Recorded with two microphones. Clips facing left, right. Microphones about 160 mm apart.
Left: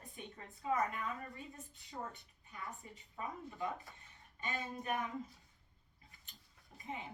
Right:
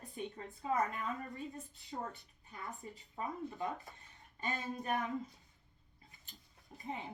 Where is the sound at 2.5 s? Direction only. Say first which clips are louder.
Right 2 dB; 35° right (ahead or behind).